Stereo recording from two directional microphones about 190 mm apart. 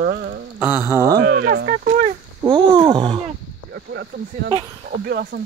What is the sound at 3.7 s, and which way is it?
Speech, 65° right (ahead or behind).